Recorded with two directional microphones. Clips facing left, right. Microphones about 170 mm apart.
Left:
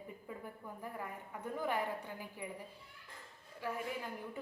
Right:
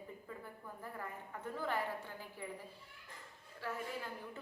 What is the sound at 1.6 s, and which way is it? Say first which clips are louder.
Speech: left 2 dB; 15° left (ahead or behind).